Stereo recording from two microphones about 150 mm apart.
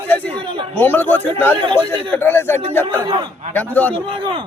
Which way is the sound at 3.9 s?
35° right (ahead or behind).